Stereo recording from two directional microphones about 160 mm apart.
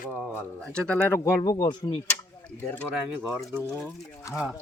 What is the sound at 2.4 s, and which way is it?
Speech, 10° left (ahead or behind).